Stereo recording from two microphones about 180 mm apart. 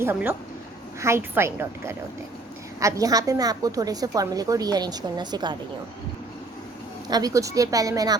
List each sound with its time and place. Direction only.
0.0 s a woman's voice: 10° right (ahead or behind)
7.1 s a woman's voice: 20° right (ahead or behind)